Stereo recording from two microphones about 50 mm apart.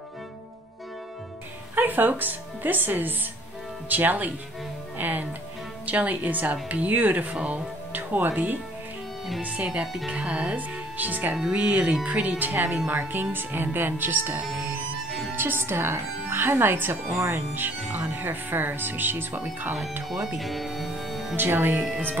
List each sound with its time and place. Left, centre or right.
1.8 s speech: right
13.1 s speech: right
15.0 s music: centre
15.3 s speech: right
20.3 s speech: centre
21.4 s speech: right